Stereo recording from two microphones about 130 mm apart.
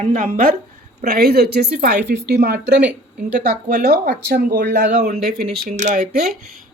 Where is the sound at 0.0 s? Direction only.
85° right.